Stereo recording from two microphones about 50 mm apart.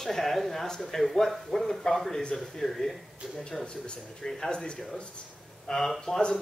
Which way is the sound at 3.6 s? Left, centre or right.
Centre.